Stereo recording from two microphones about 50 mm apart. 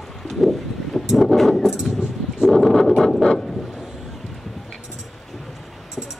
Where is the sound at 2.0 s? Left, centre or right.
Centre.